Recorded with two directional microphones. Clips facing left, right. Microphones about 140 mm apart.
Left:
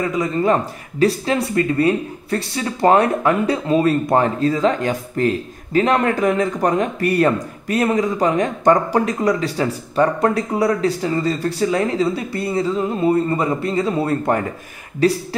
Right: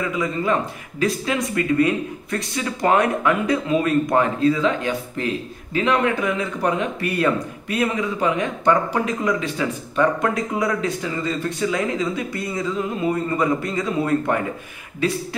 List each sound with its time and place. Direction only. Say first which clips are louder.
0.0 s speech: left 4 dB; 35° left (ahead or behind)